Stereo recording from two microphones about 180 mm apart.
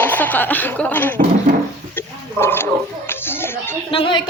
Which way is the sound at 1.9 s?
10° left (ahead or behind).